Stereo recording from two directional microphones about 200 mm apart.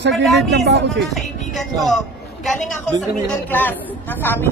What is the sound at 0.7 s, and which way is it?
Speech, 55° right (ahead or behind).